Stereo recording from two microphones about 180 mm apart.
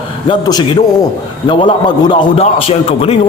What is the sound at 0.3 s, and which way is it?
A man's voice, 25° left (ahead or behind).